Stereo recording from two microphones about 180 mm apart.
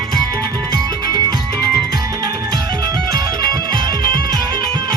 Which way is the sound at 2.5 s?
20° right (ahead or behind).